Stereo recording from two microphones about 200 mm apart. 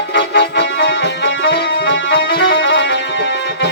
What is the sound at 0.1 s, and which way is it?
Music, 65° left (ahead or behind).